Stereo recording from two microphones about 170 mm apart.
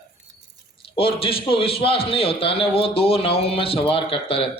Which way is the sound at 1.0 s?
35° left (ahead or behind).